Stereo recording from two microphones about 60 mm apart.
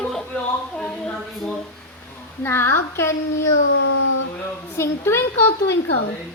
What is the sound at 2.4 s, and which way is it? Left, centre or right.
Speech, left.